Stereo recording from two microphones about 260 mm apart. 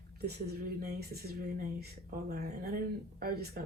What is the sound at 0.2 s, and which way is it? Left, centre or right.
Speech, right.